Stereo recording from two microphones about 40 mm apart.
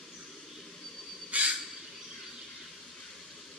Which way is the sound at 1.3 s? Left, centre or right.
Right.